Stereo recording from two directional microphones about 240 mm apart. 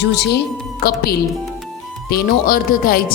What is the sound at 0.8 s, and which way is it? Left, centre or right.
Speech, left.